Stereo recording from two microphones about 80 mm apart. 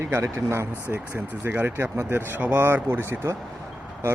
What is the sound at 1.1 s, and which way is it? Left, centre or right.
Speech, right.